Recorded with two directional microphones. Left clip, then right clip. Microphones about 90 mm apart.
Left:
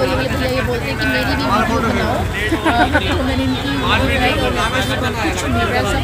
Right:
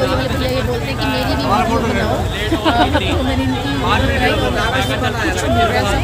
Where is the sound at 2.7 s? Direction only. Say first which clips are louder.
Even; centre (ahead or behind).